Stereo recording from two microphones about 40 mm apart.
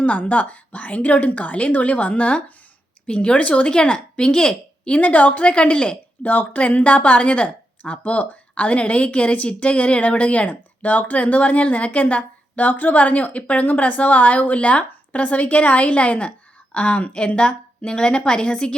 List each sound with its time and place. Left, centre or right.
0.0 s a woman's voice: left
3.7 s a woman's voice: left
4.9 s speech: left
6.5 s speech: left
12.6 s a woman's voice: left